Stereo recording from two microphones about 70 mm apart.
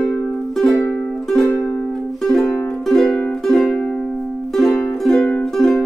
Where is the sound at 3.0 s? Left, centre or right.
Centre.